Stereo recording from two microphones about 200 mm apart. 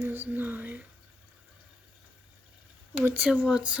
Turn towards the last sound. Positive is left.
turn(degrees=-5)  # may be behind; listen again after turning